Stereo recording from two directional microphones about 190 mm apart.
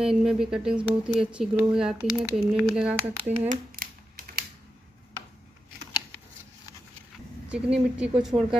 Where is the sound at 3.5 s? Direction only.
50° right (ahead or behind).